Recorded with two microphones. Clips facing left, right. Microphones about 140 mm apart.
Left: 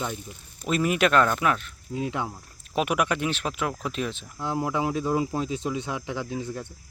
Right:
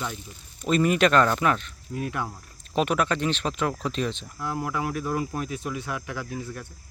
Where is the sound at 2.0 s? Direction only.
20° left (ahead or behind).